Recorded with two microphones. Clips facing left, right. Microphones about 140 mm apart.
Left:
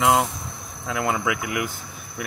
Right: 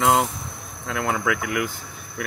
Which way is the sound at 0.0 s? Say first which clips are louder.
Even; centre (ahead or behind).